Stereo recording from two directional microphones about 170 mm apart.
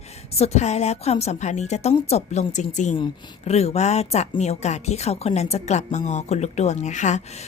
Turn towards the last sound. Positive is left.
turn(degrees=45)  # may be behind; listen again after turning